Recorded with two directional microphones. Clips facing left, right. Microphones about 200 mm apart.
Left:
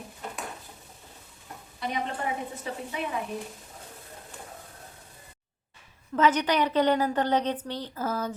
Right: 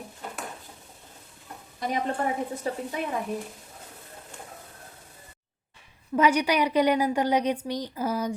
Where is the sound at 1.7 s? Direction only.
45° right (ahead or behind).